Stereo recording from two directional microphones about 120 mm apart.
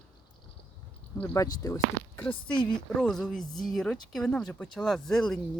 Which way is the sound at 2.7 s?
5° left (ahead or behind).